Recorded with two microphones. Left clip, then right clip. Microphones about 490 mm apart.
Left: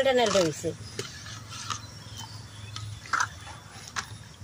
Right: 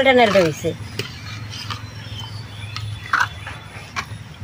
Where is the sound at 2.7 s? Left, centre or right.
Left.